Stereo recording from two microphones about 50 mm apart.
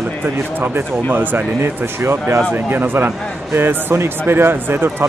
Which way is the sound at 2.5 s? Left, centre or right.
Right.